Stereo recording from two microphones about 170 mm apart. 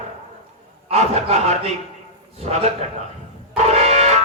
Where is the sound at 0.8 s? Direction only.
40° right (ahead or behind).